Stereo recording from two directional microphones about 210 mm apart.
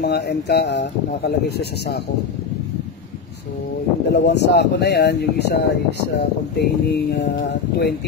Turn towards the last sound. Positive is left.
turn(degrees=50)  # may be behind; listen again after turning